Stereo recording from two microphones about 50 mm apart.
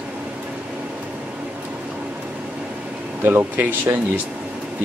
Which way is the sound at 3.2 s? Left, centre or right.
Right.